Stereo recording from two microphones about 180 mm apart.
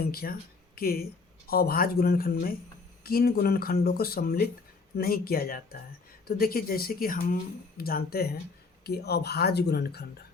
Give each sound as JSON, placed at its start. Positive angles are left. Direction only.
{"t": 0.0, "sound": "speech", "side_deg": 55}
{"t": 1.5, "sound": "speech", "side_deg": 55}